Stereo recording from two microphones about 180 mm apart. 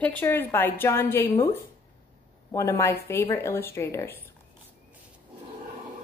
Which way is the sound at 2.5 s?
15° left (ahead or behind).